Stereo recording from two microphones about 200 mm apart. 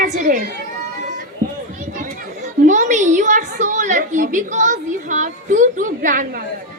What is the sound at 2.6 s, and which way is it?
A woman's voice, 35° right (ahead or behind).